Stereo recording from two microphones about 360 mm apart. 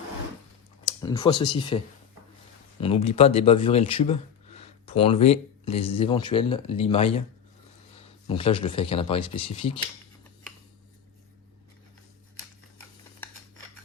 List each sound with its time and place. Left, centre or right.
1.0 s speech: centre
2.8 s speech: centre